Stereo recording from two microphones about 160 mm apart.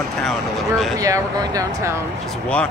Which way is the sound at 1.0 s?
20° right (ahead or behind).